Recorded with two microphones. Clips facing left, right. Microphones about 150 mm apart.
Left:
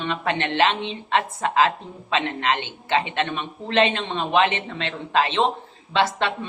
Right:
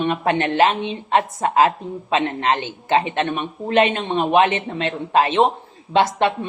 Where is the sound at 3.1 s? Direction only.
50° right (ahead or behind).